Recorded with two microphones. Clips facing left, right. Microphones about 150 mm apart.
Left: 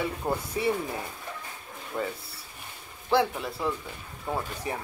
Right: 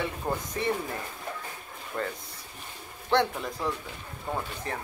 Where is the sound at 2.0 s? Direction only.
10° left (ahead or behind).